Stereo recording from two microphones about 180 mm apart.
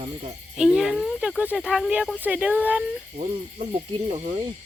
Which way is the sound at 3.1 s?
35° right (ahead or behind).